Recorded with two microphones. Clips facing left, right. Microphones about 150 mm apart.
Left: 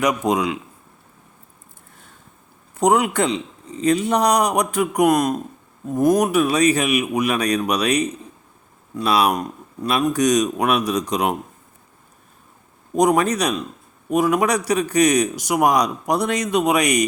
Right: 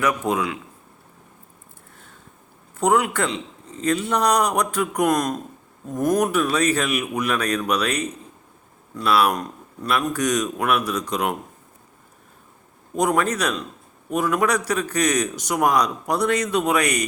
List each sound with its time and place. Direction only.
0.0 s a man's voice: 15° left (ahead or behind)
2.7 s a man's voice: 15° left (ahead or behind)
13.0 s a man's voice: 15° left (ahead or behind)